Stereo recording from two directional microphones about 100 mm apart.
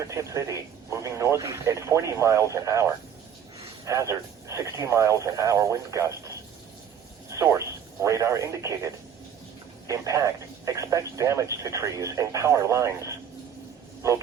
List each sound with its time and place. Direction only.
0.0 s speech: 30° right (ahead or behind)